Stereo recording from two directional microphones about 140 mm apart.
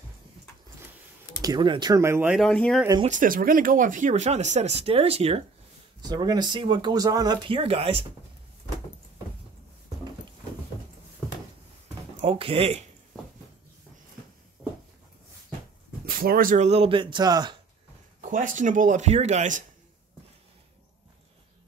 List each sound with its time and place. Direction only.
1.4 s speech: 30° right (ahead or behind)
2.3 s speech: 5° left (ahead or behind)
3.1 s speech: 75° right (ahead or behind); by 5.4 s 45° right (ahead or behind)
5.9 s speech: 30° right (ahead or behind)
7.4 s speech: 40° right (ahead or behind)
12.2 s speech: 40° right (ahead or behind)
16.1 s speech: 90° right
16.6 s speech: 45° right (ahead or behind); by 17.6 s 30° right (ahead or behind)
18.2 s speech: 70° right (ahead or behind)